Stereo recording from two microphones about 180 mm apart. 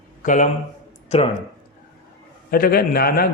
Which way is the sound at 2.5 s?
55° left (ahead or behind).